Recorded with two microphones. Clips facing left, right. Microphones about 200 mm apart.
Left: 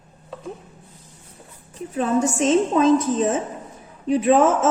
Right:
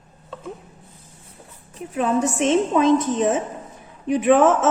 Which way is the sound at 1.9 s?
30° left (ahead or behind).